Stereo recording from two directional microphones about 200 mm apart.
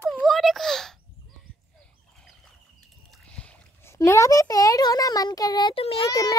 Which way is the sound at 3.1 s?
5° left (ahead or behind).